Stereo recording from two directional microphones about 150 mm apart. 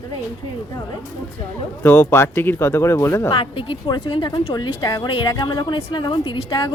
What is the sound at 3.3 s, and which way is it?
A woman's voice, 35° left (ahead or behind).